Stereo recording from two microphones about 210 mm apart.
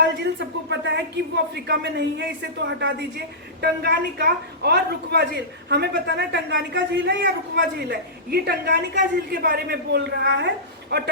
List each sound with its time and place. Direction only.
0.0 s a woman's voice: 55° right (ahead or behind)